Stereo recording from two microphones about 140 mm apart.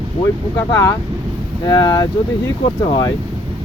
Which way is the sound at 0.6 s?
25° left (ahead or behind).